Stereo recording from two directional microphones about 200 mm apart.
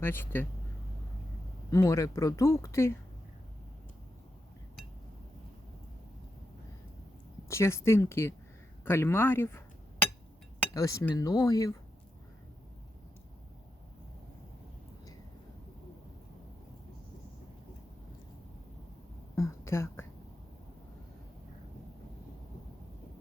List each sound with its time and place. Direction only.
0.0 s speech: 10° left (ahead or behind)
1.7 s speech: 15° left (ahead or behind)
7.4 s speech: 15° left (ahead or behind)
10.8 s speech: 15° left (ahead or behind)
19.4 s a sound: 15° left (ahead or behind)